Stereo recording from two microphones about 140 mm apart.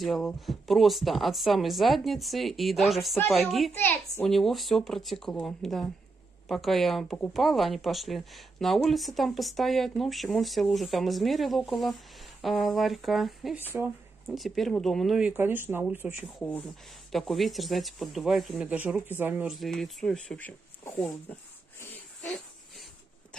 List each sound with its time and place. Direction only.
0.0 s speech: centre (ahead or behind)
3.7 s a child's voice: 15° left (ahead or behind)
4.3 s speech: centre (ahead or behind)
13.6 s speech: 15° right (ahead or behind)
14.3 s speech: centre (ahead or behind)
16.3 s a child's voice: 10° left (ahead or behind)
17.1 s speech: centre (ahead or behind)
19.5 s speech: centre (ahead or behind)